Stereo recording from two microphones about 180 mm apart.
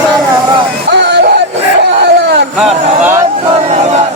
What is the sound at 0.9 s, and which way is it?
Music, 70° right (ahead or behind).